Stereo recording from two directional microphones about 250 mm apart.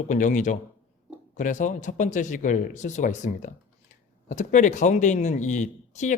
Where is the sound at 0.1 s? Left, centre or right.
Left.